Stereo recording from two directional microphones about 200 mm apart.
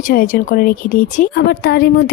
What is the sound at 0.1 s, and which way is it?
Speech, 45° left (ahead or behind).